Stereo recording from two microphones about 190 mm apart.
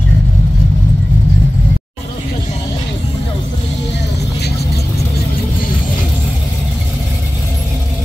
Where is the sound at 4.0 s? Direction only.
60° left (ahead or behind).